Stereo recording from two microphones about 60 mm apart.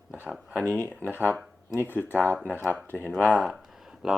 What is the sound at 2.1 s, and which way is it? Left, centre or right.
Speech, right.